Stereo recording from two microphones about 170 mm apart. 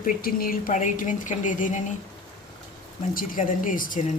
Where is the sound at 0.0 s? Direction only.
60° left (ahead or behind).